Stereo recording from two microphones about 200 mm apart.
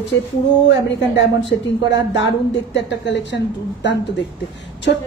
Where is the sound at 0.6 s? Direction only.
65° left (ahead or behind).